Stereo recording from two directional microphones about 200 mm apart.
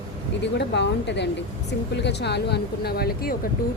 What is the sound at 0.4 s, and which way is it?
A woman's voice, 60° left (ahead or behind).